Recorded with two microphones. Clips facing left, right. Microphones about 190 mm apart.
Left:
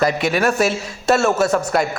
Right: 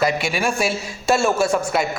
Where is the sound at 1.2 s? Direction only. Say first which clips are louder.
Left 2 dB; 10° right (ahead or behind).